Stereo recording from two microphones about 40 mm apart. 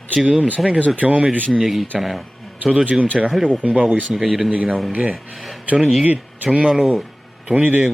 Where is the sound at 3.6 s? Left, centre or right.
Right.